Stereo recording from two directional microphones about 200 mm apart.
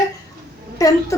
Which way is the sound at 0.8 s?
15° left (ahead or behind).